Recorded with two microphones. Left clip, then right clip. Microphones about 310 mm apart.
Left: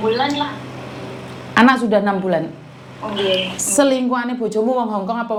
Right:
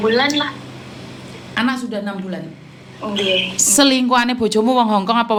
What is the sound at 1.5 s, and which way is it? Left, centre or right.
Speech, left.